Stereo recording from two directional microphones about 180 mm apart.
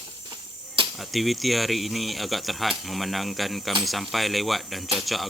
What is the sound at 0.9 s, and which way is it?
Speech, centre (ahead or behind).